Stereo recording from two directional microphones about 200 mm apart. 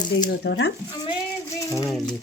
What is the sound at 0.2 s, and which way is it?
Speech, 55° left (ahead or behind).